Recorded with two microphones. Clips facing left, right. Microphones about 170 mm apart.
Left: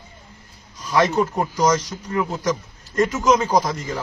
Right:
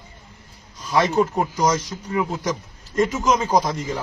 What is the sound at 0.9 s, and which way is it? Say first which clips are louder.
A man's voice: even; 10° right (ahead or behind).